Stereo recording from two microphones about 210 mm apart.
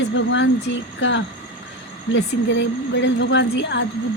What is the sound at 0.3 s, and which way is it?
A woman's voice, 60° left (ahead or behind).